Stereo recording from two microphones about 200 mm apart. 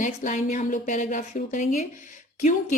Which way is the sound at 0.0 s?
40° left (ahead or behind).